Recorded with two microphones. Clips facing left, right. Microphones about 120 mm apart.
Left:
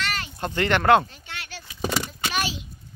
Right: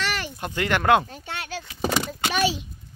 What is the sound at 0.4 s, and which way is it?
Speech, 10° right (ahead or behind).